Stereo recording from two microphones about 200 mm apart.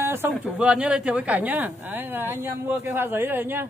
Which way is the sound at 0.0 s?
10° right (ahead or behind).